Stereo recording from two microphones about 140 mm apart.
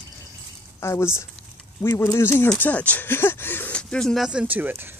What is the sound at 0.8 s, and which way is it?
Speech, 20° left (ahead or behind).